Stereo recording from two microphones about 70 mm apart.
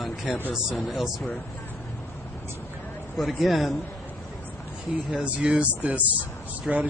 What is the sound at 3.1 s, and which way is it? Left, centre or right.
Speech, centre.